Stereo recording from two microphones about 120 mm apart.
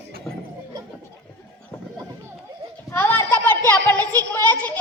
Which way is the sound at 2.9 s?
20° left (ahead or behind).